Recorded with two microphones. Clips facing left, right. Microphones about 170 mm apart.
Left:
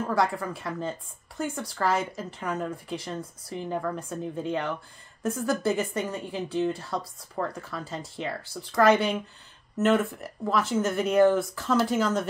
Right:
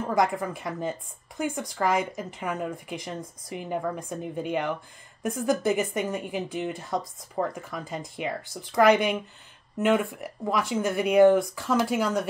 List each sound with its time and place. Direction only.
0.0 s speech: 15° right (ahead or behind)